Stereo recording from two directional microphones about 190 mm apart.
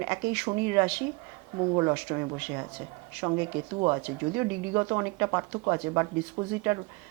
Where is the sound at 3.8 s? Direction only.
20° right (ahead or behind).